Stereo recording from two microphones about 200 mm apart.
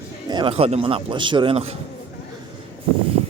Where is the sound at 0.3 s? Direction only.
25° right (ahead or behind).